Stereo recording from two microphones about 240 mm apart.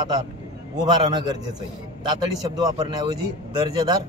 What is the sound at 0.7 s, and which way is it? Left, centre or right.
A man's voice, centre.